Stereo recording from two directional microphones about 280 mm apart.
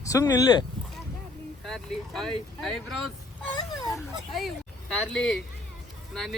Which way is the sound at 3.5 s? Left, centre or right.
Centre.